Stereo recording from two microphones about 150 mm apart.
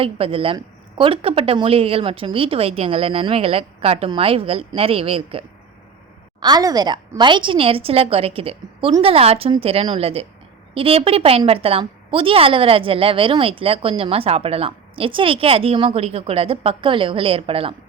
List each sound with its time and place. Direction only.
0.0 s a woman's voice: 40° right (ahead or behind)
6.4 s a woman's voice: 25° right (ahead or behind)